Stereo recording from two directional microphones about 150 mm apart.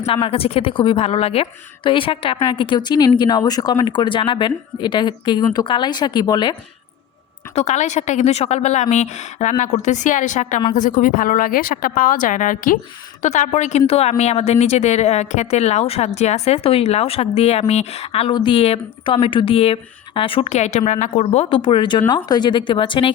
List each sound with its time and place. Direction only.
0.0 s a woman's voice: 40° left (ahead or behind)
7.5 s a woman's voice: 50° left (ahead or behind)
13.2 s a woman's voice: 50° left (ahead or behind); by 23.1 s 35° left (ahead or behind)